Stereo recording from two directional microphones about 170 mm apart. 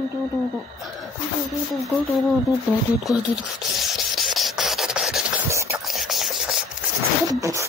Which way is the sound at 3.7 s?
Centre (ahead or behind).